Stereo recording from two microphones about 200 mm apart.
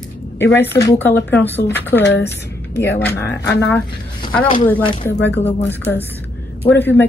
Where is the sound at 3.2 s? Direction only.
55° left (ahead or behind).